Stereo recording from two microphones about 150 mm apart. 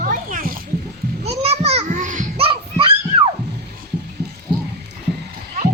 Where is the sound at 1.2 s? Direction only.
45° right (ahead or behind).